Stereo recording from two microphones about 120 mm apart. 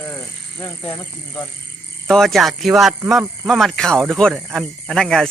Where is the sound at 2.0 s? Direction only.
5° left (ahead or behind).